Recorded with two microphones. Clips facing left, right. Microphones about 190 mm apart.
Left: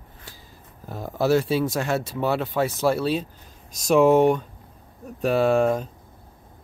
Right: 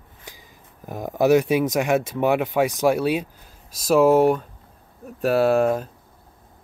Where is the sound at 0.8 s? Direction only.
15° right (ahead or behind).